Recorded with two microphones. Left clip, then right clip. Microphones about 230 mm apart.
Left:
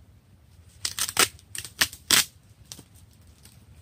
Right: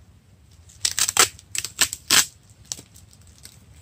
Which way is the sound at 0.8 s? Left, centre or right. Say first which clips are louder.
Right 5 dB; centre.